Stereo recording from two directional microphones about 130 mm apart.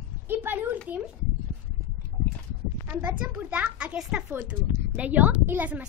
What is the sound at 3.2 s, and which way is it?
A woman's voice, 10° right (ahead or behind).